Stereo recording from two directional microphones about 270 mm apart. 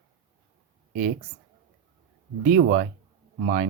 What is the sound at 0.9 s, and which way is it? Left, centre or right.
Speech, right.